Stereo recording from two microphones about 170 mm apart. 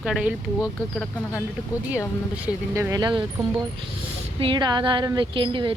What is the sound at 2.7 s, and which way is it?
Speech, 20° right (ahead or behind).